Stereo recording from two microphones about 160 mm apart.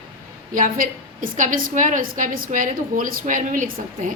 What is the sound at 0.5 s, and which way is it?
A woman's voice, 55° right (ahead or behind).